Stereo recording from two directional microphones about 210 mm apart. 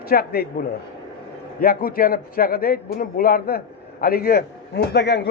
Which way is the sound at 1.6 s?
45° left (ahead or behind).